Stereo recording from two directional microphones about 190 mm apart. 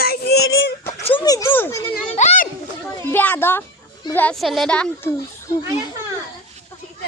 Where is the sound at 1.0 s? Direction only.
30° left (ahead or behind).